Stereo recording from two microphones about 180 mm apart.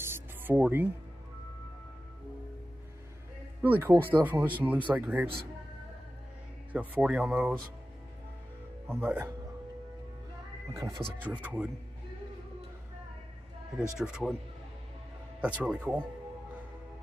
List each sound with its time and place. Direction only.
0.0 s music: 10° right (ahead or behind)
3.6 s speech: 10° right (ahead or behind)
6.7 s speech: 10° right (ahead or behind)
8.8 s speech: 10° right (ahead or behind)
10.7 s speech: 20° right (ahead or behind)
13.9 s speech: 5° right (ahead or behind)
15.6 s speech: 5° right (ahead or behind)